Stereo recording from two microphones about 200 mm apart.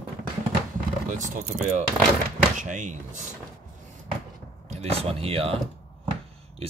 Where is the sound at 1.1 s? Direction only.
40° right (ahead or behind).